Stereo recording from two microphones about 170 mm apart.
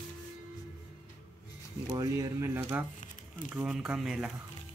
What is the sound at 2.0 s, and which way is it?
Speech, 20° right (ahead or behind).